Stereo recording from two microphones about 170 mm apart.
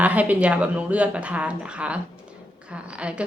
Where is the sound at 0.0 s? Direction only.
10° right (ahead or behind).